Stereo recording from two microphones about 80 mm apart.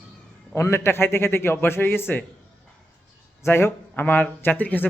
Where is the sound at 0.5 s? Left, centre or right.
Left.